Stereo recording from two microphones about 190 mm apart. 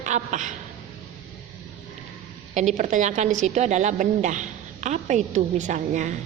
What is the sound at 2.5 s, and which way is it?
A woman's voice, 40° right (ahead or behind).